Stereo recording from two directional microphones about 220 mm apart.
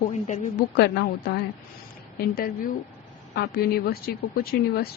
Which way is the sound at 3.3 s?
45° left (ahead or behind).